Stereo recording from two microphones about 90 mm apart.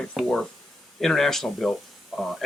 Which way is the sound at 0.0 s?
5° left (ahead or behind).